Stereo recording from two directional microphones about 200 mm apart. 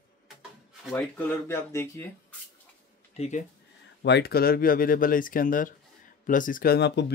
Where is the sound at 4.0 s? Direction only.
60° left (ahead or behind).